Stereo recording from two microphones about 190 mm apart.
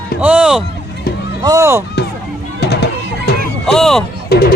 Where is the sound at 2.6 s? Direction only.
60° left (ahead or behind).